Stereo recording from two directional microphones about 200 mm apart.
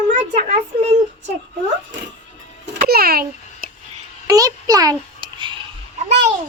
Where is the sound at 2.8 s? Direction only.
50° right (ahead or behind).